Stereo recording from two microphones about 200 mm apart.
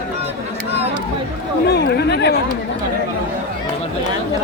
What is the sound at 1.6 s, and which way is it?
Speech, 55° left (ahead or behind).